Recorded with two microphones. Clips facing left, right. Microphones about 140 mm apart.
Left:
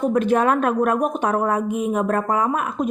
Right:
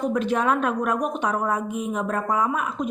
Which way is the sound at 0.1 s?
50° left (ahead or behind).